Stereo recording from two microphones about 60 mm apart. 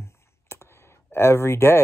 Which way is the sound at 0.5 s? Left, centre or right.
Left.